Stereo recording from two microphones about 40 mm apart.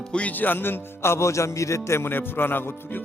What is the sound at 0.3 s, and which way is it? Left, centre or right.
Speech, left.